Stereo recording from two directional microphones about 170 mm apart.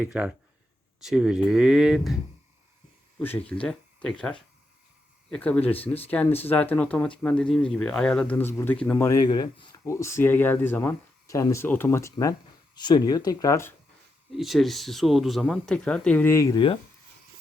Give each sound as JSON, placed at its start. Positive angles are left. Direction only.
{"t": 0.0, "sound": "speech", "side_deg": -5}
{"t": 3.2, "sound": "speech", "side_deg": 10}
{"t": 9.0, "sound": "speech", "side_deg": 20}
{"t": 14.3, "sound": "speech", "side_deg": 0}